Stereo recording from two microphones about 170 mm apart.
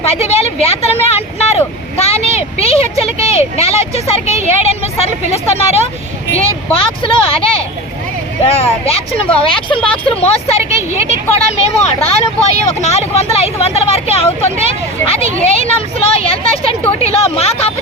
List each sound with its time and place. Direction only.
0.0 s speech: 35° left (ahead or behind)
6.7 s speech: 30° left (ahead or behind)
8.4 s speech: 35° left (ahead or behind)